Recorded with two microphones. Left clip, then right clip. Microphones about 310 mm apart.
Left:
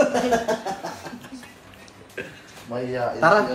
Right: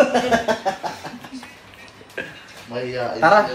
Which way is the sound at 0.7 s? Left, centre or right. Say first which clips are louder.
Right 6 dB; right.